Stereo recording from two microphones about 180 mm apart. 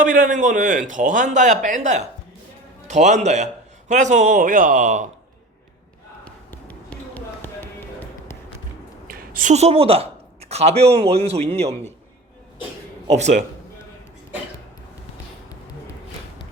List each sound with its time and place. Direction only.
0.0 s a man's voice: 45° right (ahead or behind)
6.2 s basketball bounce: 10° left (ahead or behind)
9.0 s speech: 50° right (ahead or behind)
13.1 s a man's voice: 40° right (ahead or behind)